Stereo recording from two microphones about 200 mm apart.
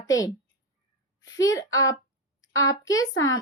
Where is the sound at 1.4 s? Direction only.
15° left (ahead or behind).